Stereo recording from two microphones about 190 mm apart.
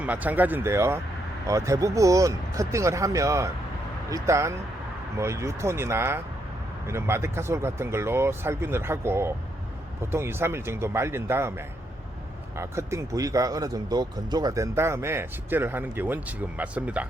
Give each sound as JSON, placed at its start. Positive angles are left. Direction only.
{"t": 0.0, "sound": "speech", "side_deg": -10}